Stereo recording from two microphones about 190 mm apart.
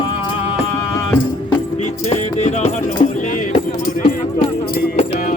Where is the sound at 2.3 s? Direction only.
35° left (ahead or behind).